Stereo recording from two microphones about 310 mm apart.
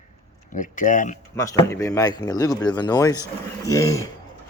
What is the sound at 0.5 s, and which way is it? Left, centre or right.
Speech, left.